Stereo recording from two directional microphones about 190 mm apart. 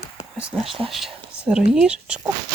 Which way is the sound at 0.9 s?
Centre (ahead or behind).